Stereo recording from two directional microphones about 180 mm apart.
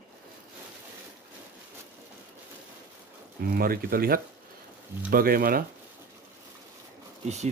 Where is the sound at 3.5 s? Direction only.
55° right (ahead or behind).